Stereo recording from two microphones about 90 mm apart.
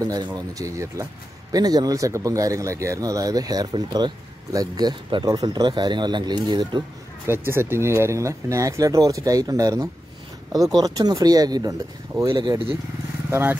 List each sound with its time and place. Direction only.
0.0 s speech: 50° right (ahead or behind)
7.2 s speech: 25° right (ahead or behind); by 11.7 s 45° right (ahead or behind)
12.3 s speech: 60° right (ahead or behind)
13.3 s speech: 25° right (ahead or behind)